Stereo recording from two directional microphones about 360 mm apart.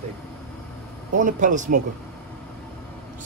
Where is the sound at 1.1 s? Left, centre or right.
Right.